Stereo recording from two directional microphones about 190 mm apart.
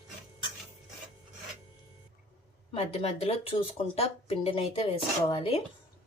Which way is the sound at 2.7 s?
35° left (ahead or behind).